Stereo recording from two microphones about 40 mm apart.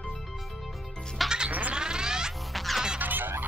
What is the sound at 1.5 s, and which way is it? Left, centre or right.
Cat, right.